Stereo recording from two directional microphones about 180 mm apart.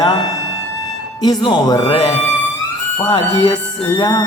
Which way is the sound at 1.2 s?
25° left (ahead or behind).